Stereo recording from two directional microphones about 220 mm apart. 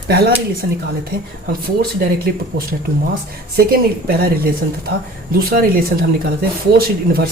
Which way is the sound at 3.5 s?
45° right (ahead or behind).